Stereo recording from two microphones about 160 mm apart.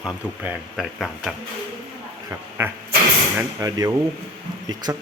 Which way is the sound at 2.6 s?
15° right (ahead or behind).